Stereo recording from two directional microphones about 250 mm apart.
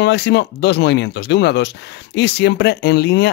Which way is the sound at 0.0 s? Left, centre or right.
Left.